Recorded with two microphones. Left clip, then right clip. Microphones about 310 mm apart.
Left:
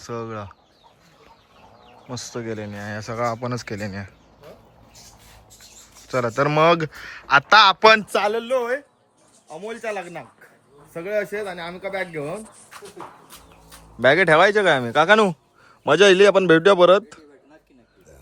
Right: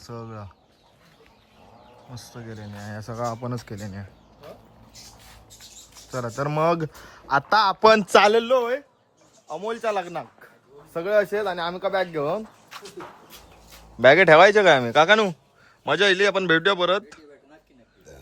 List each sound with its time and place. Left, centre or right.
0.0 s speech: centre
2.1 s speech: centre
8.2 s speech: right
8.5 s speech: centre
12.7 s shuffle: centre
13.7 s speech: centre